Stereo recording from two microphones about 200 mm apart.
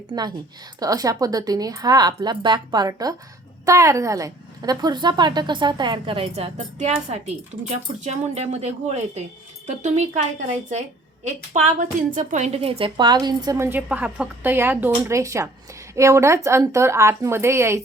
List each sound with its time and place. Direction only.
0.1 s a woman's voice: 20° right (ahead or behind)
10.7 s a sound: 35° right (ahead or behind)
11.8 s a woman's voice: 40° right (ahead or behind); by 17.7 s 15° right (ahead or behind)